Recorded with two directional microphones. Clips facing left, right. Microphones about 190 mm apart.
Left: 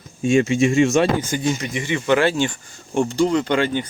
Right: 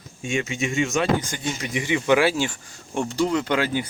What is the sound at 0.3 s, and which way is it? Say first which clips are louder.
Speech: left 10 dB; 35° left (ahead or behind).